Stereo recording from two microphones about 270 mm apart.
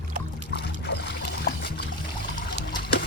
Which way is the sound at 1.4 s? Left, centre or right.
Left.